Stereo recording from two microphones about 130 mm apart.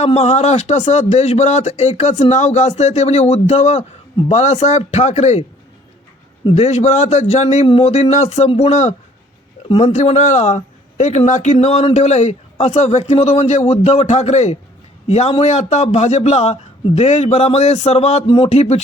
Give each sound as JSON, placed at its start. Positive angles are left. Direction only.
{"t": 0.0, "sound": "a man's voice", "side_deg": 55}
{"t": 6.5, "sound": "a man's voice", "side_deg": 60}